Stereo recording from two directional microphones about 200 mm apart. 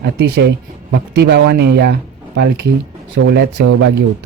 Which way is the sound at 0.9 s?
55° right (ahead or behind).